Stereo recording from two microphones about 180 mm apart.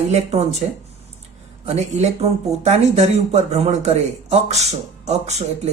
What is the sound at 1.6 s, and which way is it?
A man's voice, 40° right (ahead or behind).